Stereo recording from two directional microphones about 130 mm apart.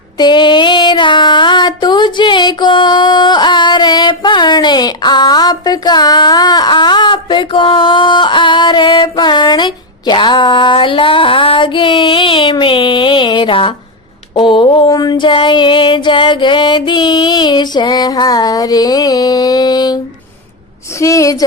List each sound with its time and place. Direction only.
0.2 s music: 35° left (ahead or behind)
14.8 s music: 30° left (ahead or behind)
21.0 s a woman's voice: 25° left (ahead or behind)